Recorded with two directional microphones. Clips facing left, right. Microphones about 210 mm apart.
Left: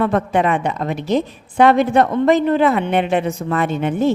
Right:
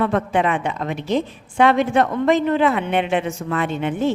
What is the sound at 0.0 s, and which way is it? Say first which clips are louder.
A woman's voice: left 2 dB; 40° left (ahead or behind).